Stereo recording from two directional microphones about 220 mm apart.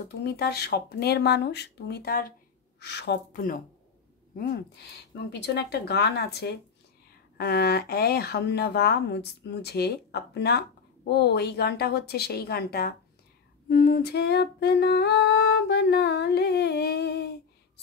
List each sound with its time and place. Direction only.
0.2 s humming: 45° left (ahead or behind)
5.1 s humming: 50° left (ahead or behind)